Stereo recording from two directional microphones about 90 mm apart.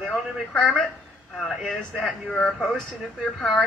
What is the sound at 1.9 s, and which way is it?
A man's voice, centre (ahead or behind).